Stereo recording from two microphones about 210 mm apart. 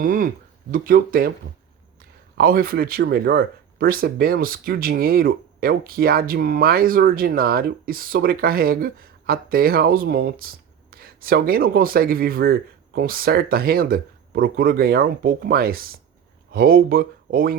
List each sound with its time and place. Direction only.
0.0 s speech: 40° right (ahead or behind)
2.4 s speech: 45° right (ahead or behind)